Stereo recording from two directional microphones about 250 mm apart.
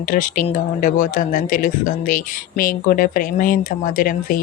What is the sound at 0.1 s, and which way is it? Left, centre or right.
Speech, left.